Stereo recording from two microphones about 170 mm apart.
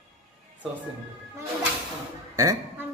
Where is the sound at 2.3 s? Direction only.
15° right (ahead or behind).